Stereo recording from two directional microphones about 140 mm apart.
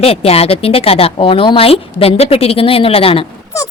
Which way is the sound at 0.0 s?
45° left (ahead or behind).